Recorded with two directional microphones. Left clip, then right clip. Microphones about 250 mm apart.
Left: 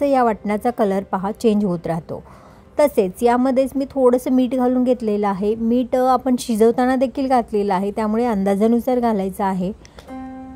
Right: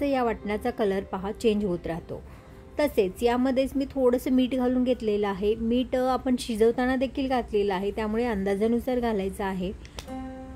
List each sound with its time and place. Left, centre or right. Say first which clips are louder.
0.0 s a woman's voice: left 9 dB; left